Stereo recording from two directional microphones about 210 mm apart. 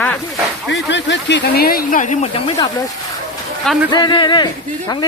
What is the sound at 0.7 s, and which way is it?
Speech, 60° left (ahead or behind).